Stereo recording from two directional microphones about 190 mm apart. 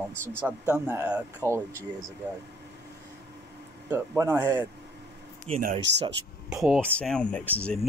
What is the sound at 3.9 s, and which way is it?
Speech, 15° right (ahead or behind).